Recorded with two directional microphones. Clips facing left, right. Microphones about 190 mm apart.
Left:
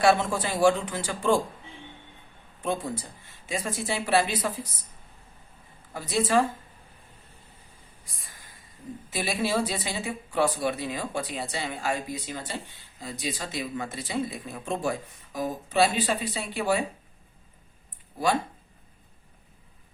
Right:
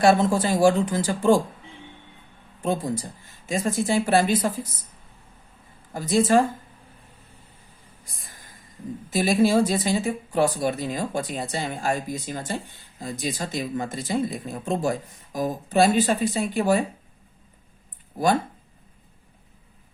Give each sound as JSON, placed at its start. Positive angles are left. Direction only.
{"t": 0.0, "sound": "speech", "side_deg": -40}
{"t": 3.5, "sound": "speech", "side_deg": -45}
{"t": 5.9, "sound": "speech", "side_deg": -45}
{"t": 9.1, "sound": "speech", "side_deg": -45}